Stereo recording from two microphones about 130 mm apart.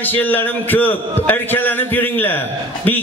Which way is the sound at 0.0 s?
15° left (ahead or behind).